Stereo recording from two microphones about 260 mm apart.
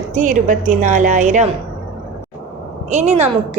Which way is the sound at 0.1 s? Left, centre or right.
Right.